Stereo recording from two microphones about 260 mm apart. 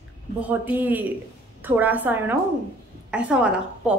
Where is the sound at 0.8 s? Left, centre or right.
Centre.